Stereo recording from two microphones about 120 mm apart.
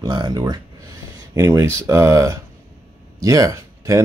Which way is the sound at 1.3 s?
25° right (ahead or behind).